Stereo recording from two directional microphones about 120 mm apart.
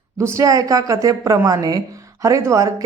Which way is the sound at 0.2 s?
25° right (ahead or behind).